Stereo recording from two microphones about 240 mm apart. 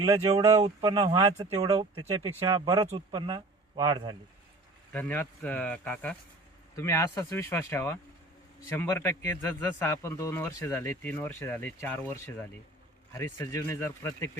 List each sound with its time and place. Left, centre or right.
0.0 s speech: centre
4.9 s a man's voice: centre